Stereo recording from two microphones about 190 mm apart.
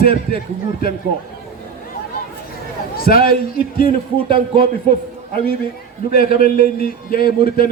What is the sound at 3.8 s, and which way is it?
Speech, 30° right (ahead or behind).